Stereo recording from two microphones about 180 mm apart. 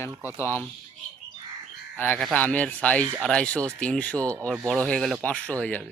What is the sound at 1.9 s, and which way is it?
Speech, 10° left (ahead or behind).